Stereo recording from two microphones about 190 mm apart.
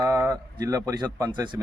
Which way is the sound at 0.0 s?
10° right (ahead or behind).